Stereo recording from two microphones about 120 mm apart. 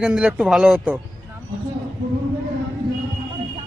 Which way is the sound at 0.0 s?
5° right (ahead or behind).